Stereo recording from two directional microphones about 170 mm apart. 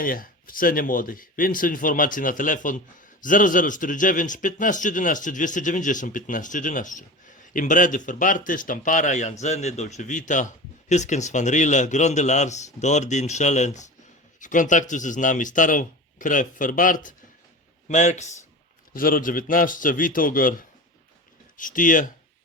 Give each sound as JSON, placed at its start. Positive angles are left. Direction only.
{"t": 0.0, "sound": "a man's voice", "side_deg": 55}
{"t": 18.9, "sound": "a man's voice", "side_deg": 55}